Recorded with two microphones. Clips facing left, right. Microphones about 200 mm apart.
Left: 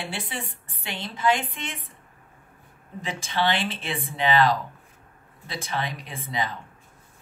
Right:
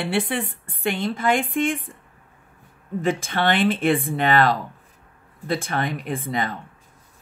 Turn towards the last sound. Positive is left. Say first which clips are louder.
# right 5 dB
turn(degrees=-50)  # may be behind; listen again after turning